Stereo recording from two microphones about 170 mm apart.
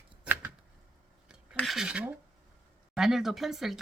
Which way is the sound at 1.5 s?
Centre (ahead or behind).